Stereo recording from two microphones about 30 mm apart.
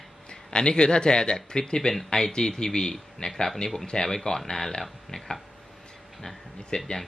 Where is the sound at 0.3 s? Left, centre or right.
Left.